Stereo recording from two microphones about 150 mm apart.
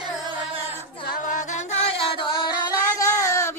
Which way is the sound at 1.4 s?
45° left (ahead or behind).